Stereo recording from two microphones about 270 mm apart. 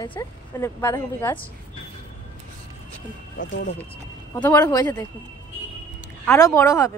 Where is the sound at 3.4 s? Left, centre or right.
Left.